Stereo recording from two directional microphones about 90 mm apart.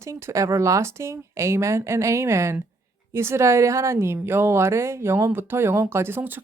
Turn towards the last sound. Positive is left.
turn(degrees=-25)  # may be behind; listen again after turning